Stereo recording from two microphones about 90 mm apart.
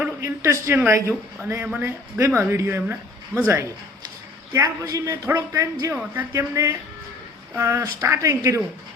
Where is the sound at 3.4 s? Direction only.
35° right (ahead or behind).